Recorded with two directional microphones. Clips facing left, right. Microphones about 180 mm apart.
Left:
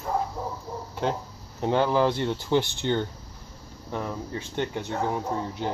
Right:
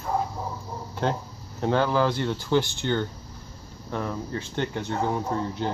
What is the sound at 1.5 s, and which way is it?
Speech, 20° left (ahead or behind).